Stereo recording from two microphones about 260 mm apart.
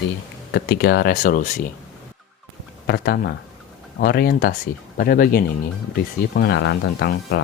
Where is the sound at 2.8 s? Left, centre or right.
Left.